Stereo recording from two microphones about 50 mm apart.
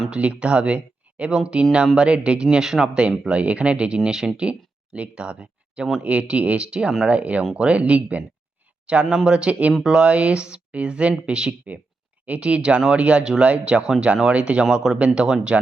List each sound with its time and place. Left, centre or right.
0.1 s speech: right
2.0 s speech: right